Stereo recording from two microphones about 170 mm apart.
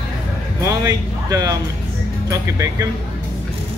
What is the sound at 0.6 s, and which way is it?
Speech, 20° right (ahead or behind).